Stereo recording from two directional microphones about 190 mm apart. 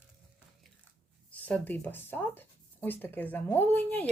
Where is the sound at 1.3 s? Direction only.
10° left (ahead or behind).